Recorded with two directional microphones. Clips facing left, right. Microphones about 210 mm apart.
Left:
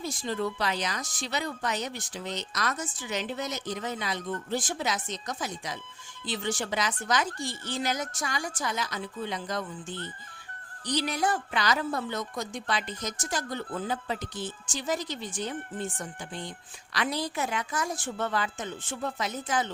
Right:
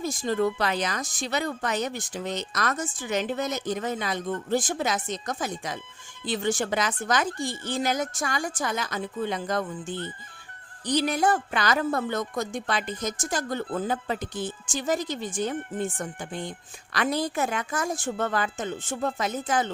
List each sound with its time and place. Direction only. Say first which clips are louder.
0.0 s speech: right 6 dB; 45° right (ahead or behind)